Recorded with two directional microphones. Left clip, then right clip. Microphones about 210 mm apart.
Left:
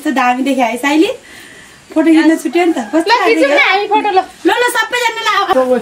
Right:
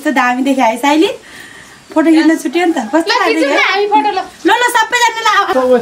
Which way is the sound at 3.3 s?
40° left (ahead or behind).